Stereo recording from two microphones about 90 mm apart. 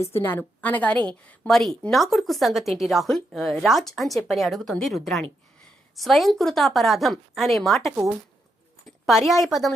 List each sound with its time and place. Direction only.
0.0 s a woman's voice: 30° left (ahead or behind)
1.5 s a woman's voice: 5° left (ahead or behind)
9.0 s a woman's voice: centre (ahead or behind)